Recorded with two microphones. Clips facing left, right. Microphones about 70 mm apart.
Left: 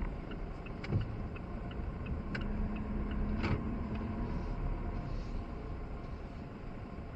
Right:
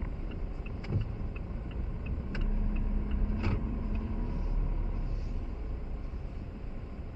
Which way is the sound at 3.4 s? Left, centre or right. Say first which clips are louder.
Right 1 dB; left.